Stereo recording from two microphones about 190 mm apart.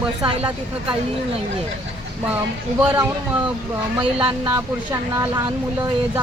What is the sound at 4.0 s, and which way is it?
Speech, 25° right (ahead or behind).